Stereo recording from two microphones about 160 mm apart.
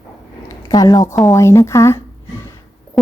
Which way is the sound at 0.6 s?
25° left (ahead or behind).